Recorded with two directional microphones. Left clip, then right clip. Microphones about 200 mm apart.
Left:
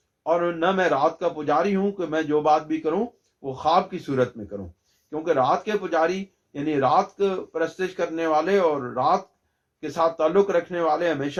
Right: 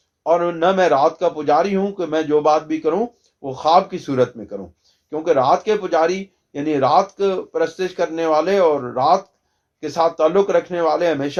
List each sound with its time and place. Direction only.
0.3 s speech: 40° right (ahead or behind)